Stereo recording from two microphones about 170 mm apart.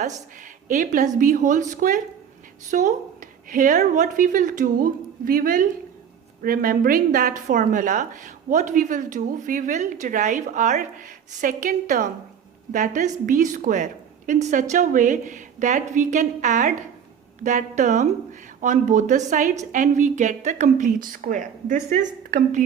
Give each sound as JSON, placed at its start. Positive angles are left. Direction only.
{"t": 0.4, "sound": "a woman's voice", "side_deg": -50}